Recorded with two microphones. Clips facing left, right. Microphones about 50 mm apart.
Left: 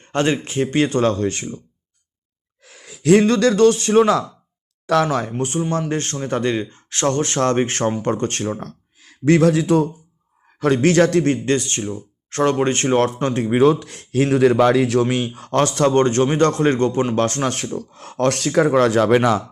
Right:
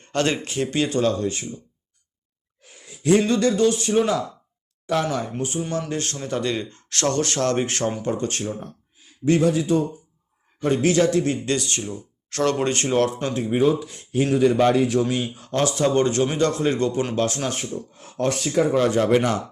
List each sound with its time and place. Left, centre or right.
0.0 s speech: left
3.0 s speech: left
5.0 s speech: left
5.4 s speech: left
5.9 s speech: left
8.0 s speech: left
10.6 s speech: left
11.4 s speech: left
12.7 s speech: left
15.1 s speech: left
17.6 s speech: left